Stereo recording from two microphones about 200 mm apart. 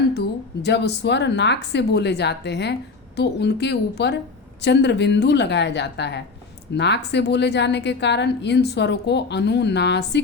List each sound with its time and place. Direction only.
0.1 s a woman's voice: 55° left (ahead or behind)